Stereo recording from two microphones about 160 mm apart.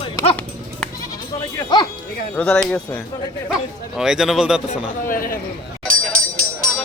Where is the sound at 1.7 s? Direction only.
25° left (ahead or behind).